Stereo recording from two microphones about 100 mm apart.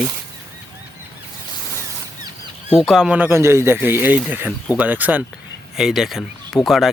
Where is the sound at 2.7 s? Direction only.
Centre (ahead or behind).